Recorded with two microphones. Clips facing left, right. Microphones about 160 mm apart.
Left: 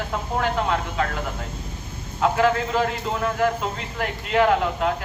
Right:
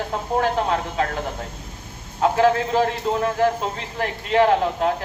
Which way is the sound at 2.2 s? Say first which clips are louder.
Right 2 dB; 35° right (ahead or behind).